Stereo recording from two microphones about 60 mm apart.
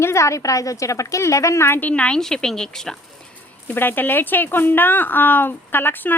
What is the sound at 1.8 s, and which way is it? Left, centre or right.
Speech, left.